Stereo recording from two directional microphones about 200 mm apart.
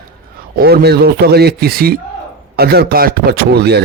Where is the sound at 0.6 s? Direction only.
50° right (ahead or behind).